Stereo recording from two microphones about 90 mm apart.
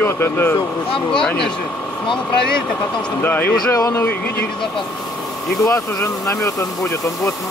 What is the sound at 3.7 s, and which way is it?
Speech, 35° left (ahead or behind).